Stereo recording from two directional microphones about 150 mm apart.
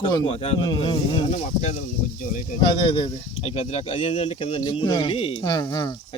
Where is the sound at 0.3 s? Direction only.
40° left (ahead or behind).